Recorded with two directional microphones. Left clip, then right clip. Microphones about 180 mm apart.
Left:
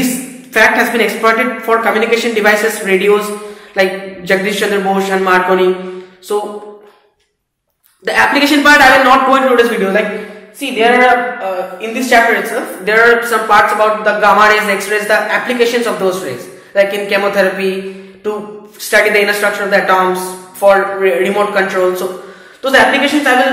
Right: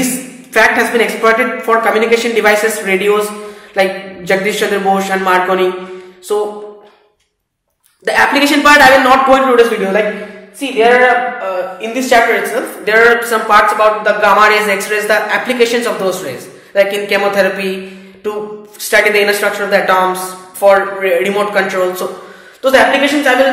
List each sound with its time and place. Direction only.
0.0 s a woman's voice: centre (ahead or behind)
1.7 s a woman's voice: 10° right (ahead or behind)
8.0 s a woman's voice: 10° right (ahead or behind)
11.8 s a woman's voice: 15° right (ahead or behind)